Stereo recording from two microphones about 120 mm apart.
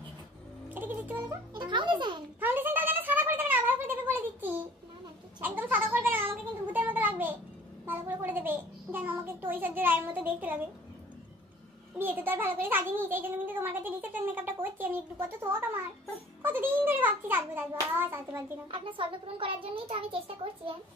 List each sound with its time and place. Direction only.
0.7 s music: 15° right (ahead or behind)
0.9 s speech: 15° right (ahead or behind)
1.5 s a child's voice: 40° right (ahead or behind)
2.4 s a sound: 15° right (ahead or behind)
5.4 s cat: 15° right (ahead or behind)
7.8 s a child's voice: 15° right (ahead or behind)
12.0 s a child's voice: 15° right (ahead or behind)
18.7 s a child's voice: 45° right (ahead or behind)